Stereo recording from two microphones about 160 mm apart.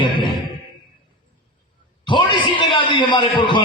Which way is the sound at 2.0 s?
30° left (ahead or behind).